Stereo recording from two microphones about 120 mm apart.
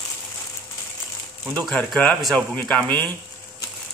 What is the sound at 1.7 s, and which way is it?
A man's voice, 5° left (ahead or behind).